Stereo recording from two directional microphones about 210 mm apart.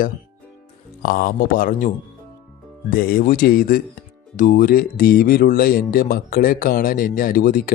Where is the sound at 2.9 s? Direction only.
45° left (ahead or behind).